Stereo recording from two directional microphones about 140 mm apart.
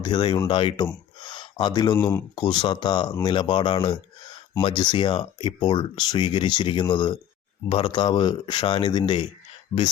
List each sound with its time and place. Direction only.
0.0 s speech: 35° left (ahead or behind)
1.2 s a sound: 35° left (ahead or behind)
2.0 s speech: 15° left (ahead or behind)
2.3 s speech: 30° left (ahead or behind)